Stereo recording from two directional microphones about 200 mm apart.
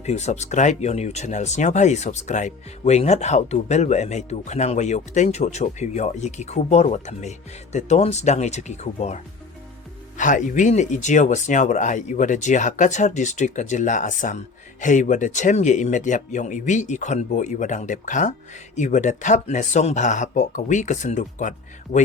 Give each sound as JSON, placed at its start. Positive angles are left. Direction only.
{"t": 0.0, "sound": "speech", "side_deg": 35}